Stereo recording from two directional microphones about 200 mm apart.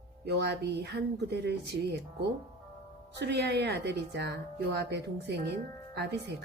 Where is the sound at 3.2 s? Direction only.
55° right (ahead or behind).